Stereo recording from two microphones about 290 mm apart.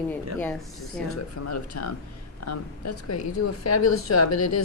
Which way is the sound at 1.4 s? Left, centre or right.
Left.